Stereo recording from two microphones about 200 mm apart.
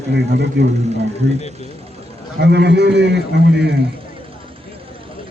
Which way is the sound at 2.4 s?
55° right (ahead or behind).